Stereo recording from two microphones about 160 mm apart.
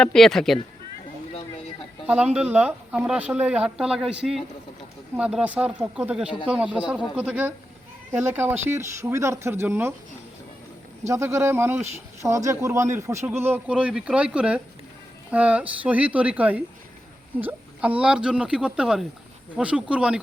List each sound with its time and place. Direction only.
0.0 s speech: 5° left (ahead or behind)
2.0 s speech: 5° right (ahead or behind)
11.0 s speech: 20° right (ahead or behind)